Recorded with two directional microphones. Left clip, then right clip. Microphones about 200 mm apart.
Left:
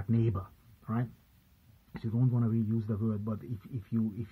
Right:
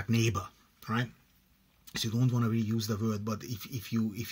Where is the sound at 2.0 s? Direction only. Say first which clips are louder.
Right 3 dB; 30° right (ahead or behind).